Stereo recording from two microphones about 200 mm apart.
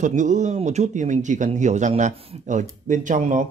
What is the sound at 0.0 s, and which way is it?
A man's voice, 40° right (ahead or behind).